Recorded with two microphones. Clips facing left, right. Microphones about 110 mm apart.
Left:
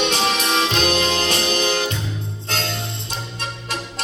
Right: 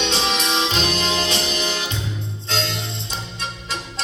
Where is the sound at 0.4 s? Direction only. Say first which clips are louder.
Left 2 dB; 50° left (ahead or behind).